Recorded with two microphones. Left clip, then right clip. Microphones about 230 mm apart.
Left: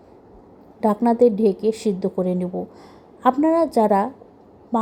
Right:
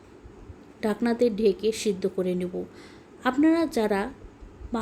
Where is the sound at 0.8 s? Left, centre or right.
Centre.